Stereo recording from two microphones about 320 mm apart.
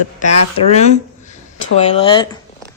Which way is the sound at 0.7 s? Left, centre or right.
Left.